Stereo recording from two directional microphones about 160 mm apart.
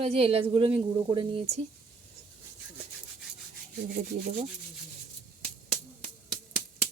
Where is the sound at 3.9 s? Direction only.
60° right (ahead or behind).